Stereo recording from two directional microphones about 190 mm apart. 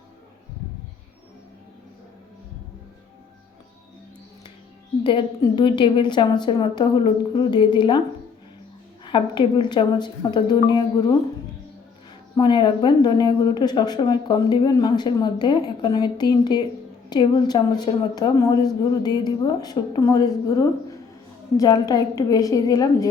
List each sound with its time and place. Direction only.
5.0 s a woman's voice: 25° left (ahead or behind)
9.0 s a woman's voice: 25° left (ahead or behind)
12.4 s a woman's voice: 25° left (ahead or behind)
21.6 s a woman's voice: 20° left (ahead or behind)